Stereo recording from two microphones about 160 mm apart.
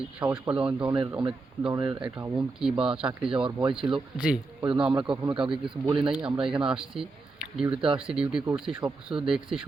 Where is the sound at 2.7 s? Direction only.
35° right (ahead or behind).